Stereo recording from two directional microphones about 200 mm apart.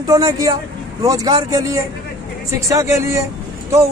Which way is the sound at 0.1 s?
15° right (ahead or behind).